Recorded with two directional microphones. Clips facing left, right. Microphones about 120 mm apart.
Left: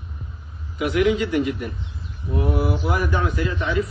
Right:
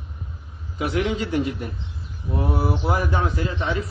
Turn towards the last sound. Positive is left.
turn(degrees=-30)  # may be behind; listen again after turning